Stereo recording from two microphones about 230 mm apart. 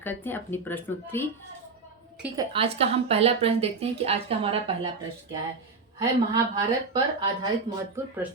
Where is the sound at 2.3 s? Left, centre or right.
Right.